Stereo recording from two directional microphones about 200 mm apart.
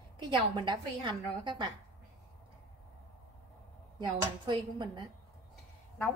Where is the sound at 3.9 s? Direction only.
20° right (ahead or behind).